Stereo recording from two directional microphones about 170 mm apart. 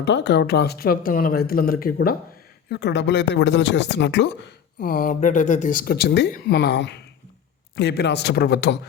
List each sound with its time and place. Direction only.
0.0 s speech: 80° left; by 2.1 s 60° left (ahead or behind)
2.6 s speech: 75° left (ahead or behind)
4.8 s a man's voice: 60° left (ahead or behind)